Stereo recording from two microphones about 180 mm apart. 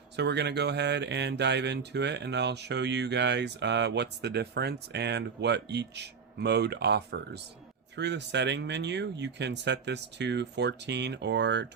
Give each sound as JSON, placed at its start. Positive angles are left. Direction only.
{"t": 0.2, "sound": "speech", "side_deg": -70}